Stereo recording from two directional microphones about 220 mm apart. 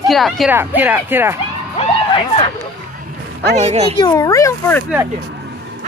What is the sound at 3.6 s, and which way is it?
Speech, 30° right (ahead or behind).